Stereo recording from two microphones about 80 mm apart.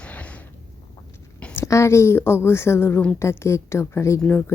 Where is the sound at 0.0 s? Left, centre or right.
Centre.